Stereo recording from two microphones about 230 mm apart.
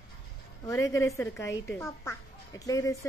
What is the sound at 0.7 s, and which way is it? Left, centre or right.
Speech, centre.